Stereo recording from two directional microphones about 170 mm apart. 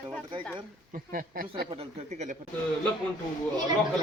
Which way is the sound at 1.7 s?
40° right (ahead or behind).